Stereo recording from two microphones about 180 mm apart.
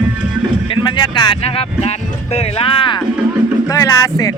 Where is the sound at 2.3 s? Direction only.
35° left (ahead or behind).